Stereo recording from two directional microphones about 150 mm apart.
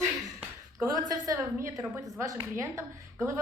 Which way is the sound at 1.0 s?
20° right (ahead or behind).